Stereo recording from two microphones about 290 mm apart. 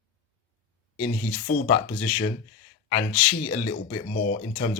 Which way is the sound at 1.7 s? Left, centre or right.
Left.